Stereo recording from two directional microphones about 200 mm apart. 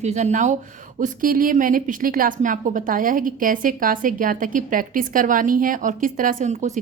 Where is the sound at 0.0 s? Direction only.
35° right (ahead or behind).